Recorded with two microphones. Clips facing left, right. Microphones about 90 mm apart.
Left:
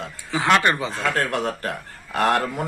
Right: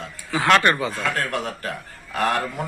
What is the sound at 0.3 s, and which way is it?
Speech, 15° left (ahead or behind).